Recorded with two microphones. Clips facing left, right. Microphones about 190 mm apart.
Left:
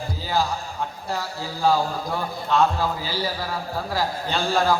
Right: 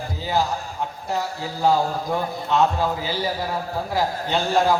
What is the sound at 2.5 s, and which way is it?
Speech, 20° right (ahead or behind).